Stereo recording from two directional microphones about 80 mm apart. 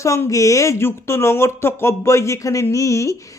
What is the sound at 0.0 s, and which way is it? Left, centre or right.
Speech, left.